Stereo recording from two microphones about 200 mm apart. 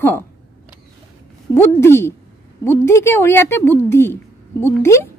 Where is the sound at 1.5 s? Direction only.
10° left (ahead or behind).